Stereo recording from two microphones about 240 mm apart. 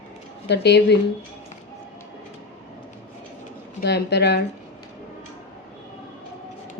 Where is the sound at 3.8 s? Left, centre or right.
Left.